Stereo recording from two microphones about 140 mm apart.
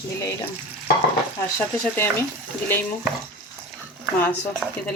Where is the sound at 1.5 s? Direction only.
15° left (ahead or behind).